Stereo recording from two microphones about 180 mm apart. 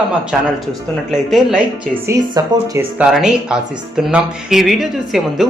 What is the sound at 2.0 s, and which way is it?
Speech, 20° right (ahead or behind).